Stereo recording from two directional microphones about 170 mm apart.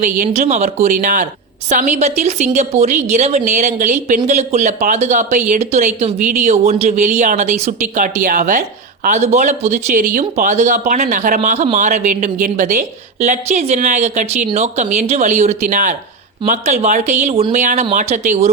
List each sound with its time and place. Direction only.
0.0 s speech: 45° right (ahead or behind)
9.0 s speech: 40° right (ahead or behind)